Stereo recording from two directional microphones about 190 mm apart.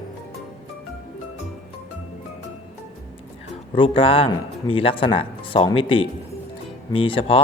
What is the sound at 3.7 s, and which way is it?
Speech, 30° left (ahead or behind).